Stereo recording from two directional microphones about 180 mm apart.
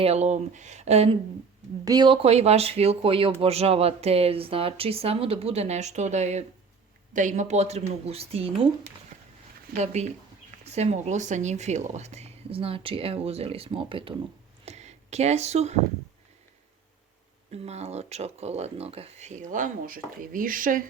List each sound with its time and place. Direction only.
0.0 s speech: 35° right (ahead or behind)
1.8 s speech: 20° right (ahead or behind)
2.2 s speech: 35° right (ahead or behind)
9.1 s a sound: 40° right (ahead or behind)
9.7 s speech: 40° right (ahead or behind)
14.6 s a sound: 40° right (ahead or behind)
17.5 s speech: 35° right (ahead or behind)